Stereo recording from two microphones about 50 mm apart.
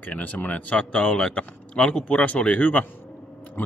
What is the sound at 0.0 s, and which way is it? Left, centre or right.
Speech, left.